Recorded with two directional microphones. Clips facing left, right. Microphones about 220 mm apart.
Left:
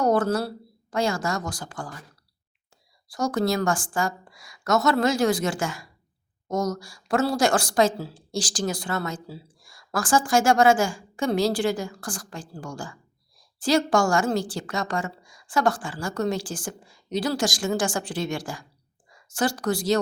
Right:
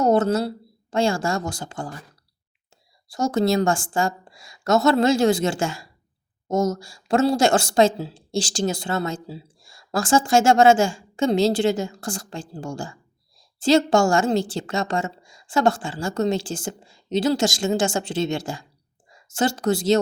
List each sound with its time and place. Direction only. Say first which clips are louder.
0.0 s a woman's voice: right 3 dB; 25° right (ahead or behind)
3.1 s a woman's voice: right 4 dB; 25° right (ahead or behind)